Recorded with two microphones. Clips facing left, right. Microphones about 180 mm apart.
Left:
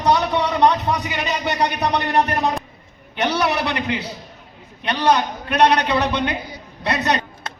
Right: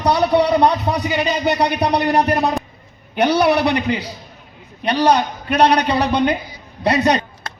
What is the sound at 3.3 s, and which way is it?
A man's voice, 35° right (ahead or behind).